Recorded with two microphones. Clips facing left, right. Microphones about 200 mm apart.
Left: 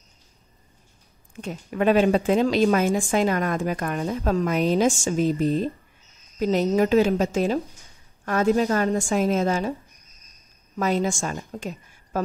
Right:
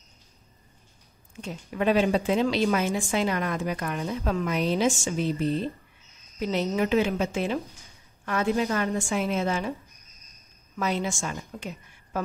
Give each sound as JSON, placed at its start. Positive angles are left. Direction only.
{"t": 1.4, "sound": "a woman's voice", "side_deg": 50}
{"t": 6.7, "sound": "a woman's voice", "side_deg": 40}
{"t": 10.8, "sound": "a woman's voice", "side_deg": 45}